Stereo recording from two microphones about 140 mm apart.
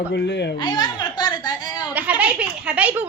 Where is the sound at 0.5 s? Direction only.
30° left (ahead or behind).